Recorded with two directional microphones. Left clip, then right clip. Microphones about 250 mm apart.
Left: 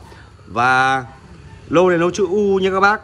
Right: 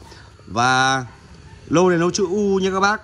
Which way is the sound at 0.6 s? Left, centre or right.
Right.